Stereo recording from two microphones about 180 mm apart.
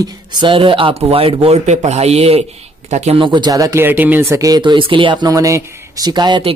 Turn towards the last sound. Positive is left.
turn(degrees=-30)  # may be behind; listen again after turning